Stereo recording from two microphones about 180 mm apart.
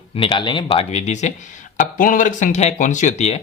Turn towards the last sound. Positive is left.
turn(degrees=40)  # may be behind; listen again after turning